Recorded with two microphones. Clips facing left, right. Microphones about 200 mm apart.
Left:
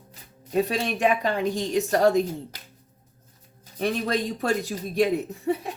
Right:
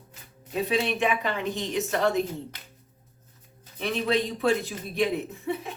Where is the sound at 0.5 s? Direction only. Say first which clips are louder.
Left 2 dB; 40° left (ahead or behind).